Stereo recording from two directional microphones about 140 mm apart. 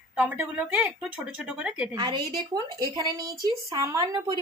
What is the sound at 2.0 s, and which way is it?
A woman's voice, 30° right (ahead or behind).